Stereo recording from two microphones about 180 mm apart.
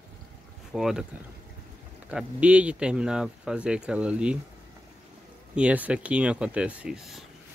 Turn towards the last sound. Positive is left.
turn(degrees=0)  # may be behind; listen again after turning